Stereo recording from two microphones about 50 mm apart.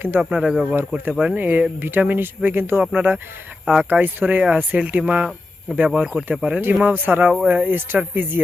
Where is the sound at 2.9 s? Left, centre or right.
Right.